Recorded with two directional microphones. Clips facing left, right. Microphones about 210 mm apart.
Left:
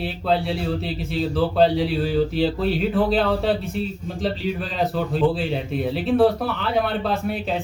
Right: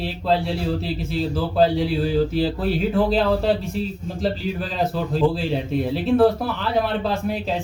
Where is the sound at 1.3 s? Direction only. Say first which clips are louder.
Left 1 dB; centre (ahead or behind).